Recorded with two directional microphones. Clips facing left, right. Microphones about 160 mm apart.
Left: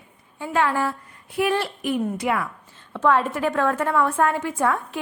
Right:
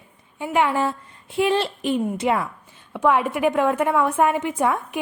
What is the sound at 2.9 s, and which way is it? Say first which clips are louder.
A woman's voice: right 1 dB; 15° right (ahead or behind).